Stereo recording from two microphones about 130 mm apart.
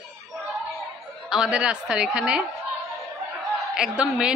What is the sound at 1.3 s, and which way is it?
A woman's voice, 5° right (ahead or behind).